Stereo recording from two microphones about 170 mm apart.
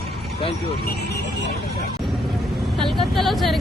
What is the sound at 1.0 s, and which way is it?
Vehicle, 85° left.